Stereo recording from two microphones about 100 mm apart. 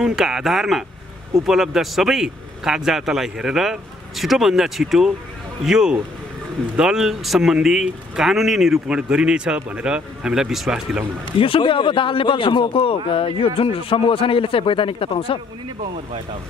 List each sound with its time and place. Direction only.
0.0 s speech: 5° right (ahead or behind)
11.3 s a man's voice: 65° left (ahead or behind)